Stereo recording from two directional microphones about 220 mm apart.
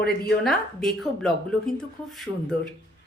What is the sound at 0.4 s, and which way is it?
Speech, 5° left (ahead or behind).